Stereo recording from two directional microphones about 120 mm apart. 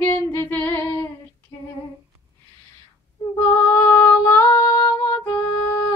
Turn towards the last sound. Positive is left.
turn(degrees=15)  # may be behind; listen again after turning